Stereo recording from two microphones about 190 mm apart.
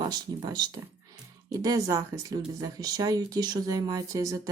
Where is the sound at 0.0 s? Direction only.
20° right (ahead or behind).